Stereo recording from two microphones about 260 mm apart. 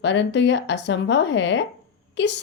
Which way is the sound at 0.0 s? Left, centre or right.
Left.